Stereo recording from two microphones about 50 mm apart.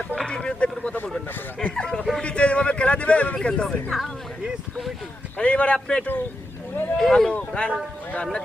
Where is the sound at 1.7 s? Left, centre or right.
Centre.